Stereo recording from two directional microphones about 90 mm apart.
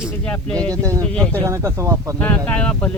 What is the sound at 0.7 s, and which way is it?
Speech, 40° right (ahead or behind).